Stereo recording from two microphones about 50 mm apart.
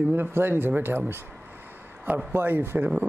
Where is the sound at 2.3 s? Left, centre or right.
Right.